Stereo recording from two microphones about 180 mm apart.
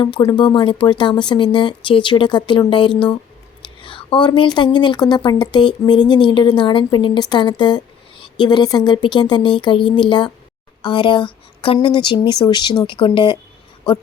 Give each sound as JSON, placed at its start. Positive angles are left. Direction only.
{"t": 0.0, "sound": "a woman's voice", "side_deg": 25}